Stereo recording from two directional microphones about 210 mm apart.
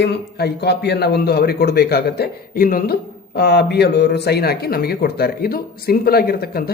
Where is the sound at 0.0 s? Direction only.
50° left (ahead or behind).